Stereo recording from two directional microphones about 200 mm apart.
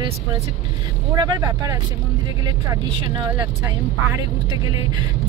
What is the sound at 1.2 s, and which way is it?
Speech, 20° right (ahead or behind).